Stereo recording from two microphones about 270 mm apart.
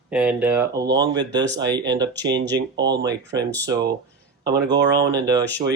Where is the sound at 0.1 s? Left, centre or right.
Centre.